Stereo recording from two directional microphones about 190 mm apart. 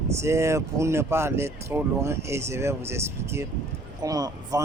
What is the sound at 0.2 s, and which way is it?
Speech, 15° right (ahead or behind).